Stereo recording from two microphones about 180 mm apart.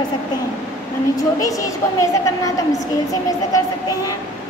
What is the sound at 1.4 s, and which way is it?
A woman's voice, 20° left (ahead or behind).